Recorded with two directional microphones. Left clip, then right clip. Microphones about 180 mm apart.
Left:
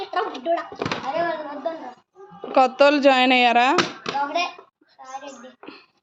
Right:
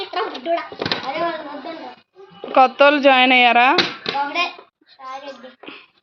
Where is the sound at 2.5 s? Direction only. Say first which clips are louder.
Right 3 dB; 15° left (ahead or behind).